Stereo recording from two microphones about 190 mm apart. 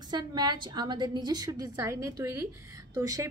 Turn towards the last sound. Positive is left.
turn(degrees=-15)  # may be behind; listen again after turning